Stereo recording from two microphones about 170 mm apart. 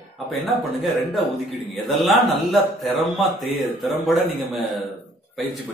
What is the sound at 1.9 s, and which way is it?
Speech, centre (ahead or behind).